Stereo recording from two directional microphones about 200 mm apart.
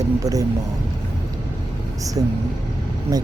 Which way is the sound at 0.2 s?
20° right (ahead or behind).